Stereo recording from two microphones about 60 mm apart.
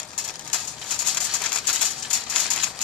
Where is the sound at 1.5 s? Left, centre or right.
Centre.